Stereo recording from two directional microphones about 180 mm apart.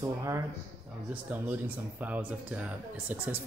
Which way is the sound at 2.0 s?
10° right (ahead or behind).